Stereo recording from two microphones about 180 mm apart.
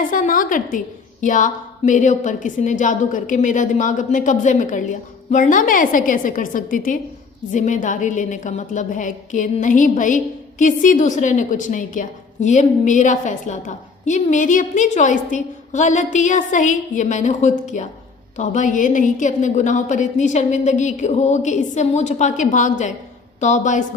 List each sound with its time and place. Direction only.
0.1 s a woman's voice: 50° left (ahead or behind)